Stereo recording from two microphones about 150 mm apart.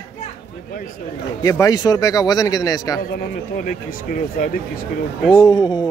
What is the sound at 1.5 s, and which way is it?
Speech, 25° left (ahead or behind).